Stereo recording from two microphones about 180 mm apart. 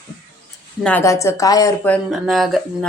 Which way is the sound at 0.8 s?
15° left (ahead or behind).